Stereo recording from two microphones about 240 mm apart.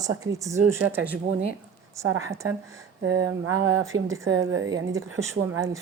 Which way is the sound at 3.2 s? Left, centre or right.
Right.